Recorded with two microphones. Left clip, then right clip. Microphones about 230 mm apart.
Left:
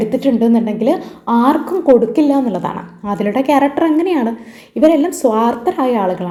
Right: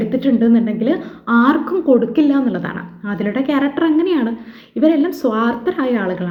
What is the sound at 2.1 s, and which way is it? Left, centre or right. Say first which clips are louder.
A woman's voice: left 2 dB; right.